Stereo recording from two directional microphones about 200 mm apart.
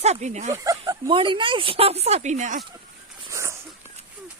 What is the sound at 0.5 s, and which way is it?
Speech, 15° right (ahead or behind).